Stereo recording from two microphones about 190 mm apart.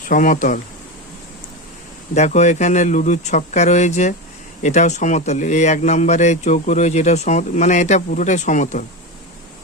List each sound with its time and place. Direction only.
0.1 s speech: 45° left (ahead or behind)
2.1 s speech: 35° left (ahead or behind)